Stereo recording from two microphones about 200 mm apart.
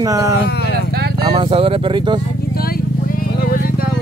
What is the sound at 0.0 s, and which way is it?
Speech, 15° right (ahead or behind).